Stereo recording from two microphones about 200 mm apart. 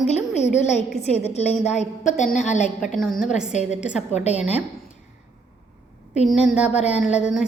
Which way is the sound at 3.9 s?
35° left (ahead or behind).